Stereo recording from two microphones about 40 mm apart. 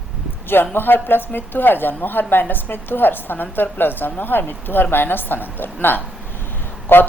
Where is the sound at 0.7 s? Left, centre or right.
Left.